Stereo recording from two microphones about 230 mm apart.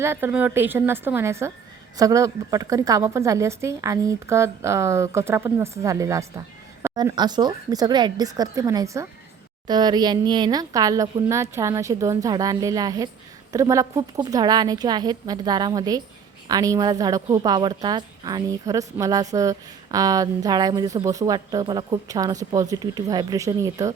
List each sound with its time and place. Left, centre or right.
0.0 s a woman's voice: centre